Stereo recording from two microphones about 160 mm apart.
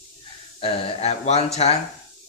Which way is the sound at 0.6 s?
35° left (ahead or behind).